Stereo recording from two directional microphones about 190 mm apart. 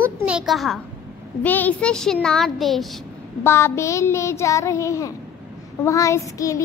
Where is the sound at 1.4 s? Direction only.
10° left (ahead or behind).